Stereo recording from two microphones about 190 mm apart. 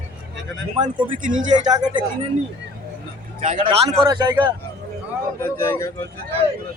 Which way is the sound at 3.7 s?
25° right (ahead or behind).